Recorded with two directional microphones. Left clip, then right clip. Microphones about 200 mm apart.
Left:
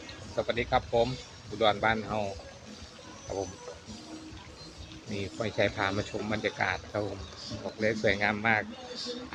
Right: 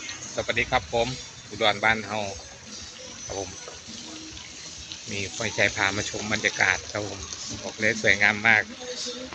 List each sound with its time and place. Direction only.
0.3 s speech: centre (ahead or behind)
5.1 s speech: centre (ahead or behind)